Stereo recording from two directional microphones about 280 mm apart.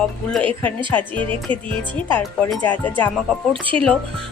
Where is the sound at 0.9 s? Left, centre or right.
Centre.